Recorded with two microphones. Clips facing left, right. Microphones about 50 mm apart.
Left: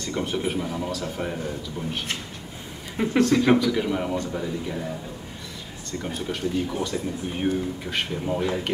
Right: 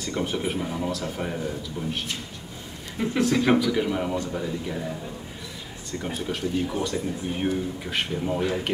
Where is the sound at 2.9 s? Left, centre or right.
Centre.